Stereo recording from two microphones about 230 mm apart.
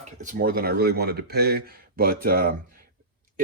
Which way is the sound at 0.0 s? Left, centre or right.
Right.